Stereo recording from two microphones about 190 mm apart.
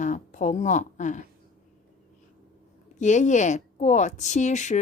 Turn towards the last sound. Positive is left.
turn(degrees=40)  # may be behind; listen again after turning